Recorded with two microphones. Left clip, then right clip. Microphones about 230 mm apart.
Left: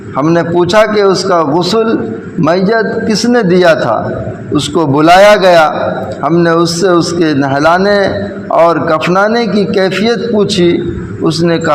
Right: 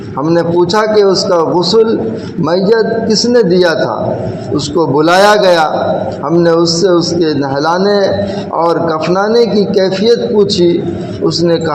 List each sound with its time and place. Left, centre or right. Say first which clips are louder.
0.2 s a man's voice: left 1 dB; left
4.9 s a man's voice: left 3 dB; left
11.4 s a man's voice: even; left